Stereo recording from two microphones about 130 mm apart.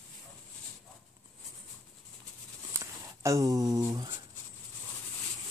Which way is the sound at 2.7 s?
20° right (ahead or behind).